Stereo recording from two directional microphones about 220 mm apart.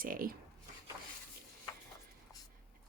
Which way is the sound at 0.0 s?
40° right (ahead or behind).